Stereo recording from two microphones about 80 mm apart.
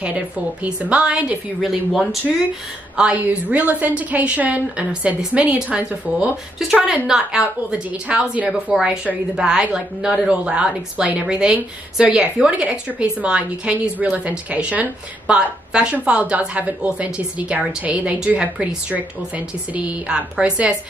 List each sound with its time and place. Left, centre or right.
0.0 s a woman's voice: centre
1.6 s speech: centre
3.0 s a woman's voice: centre